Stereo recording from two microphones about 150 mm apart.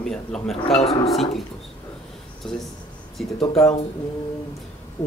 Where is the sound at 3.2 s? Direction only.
Centre (ahead or behind).